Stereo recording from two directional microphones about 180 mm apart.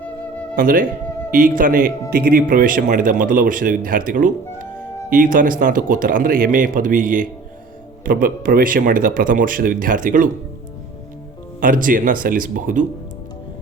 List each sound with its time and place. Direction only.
0.5 s a man's voice: 50° right (ahead or behind)
11.6 s a man's voice: 50° right (ahead or behind)